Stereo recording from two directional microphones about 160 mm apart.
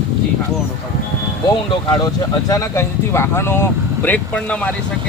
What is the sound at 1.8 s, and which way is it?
Speech, 25° left (ahead or behind).